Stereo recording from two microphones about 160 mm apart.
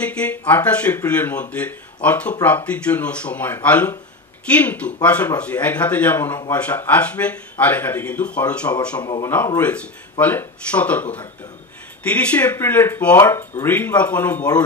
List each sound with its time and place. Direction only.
0.0 s speech: 10° left (ahead or behind)
9.0 s a man's voice: 25° left (ahead or behind)
9.6 s speech: 10° left (ahead or behind)